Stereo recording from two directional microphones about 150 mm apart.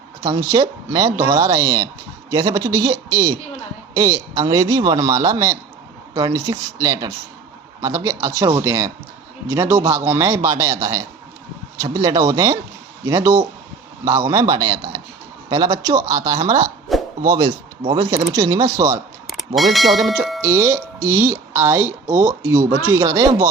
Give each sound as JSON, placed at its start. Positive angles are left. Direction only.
{"t": 0.3, "sound": "a man's voice", "side_deg": -25}
{"t": 19.3, "sound": "speech", "side_deg": 0}
{"t": 20.4, "sound": "speech", "side_deg": -15}
{"t": 22.1, "sound": "speech", "side_deg": -60}
{"t": 22.9, "sound": "a man's voice", "side_deg": -20}